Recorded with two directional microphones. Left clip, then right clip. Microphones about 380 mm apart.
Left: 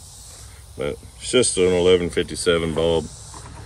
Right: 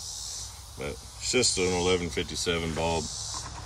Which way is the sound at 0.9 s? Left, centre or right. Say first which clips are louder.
Left 7 dB; left.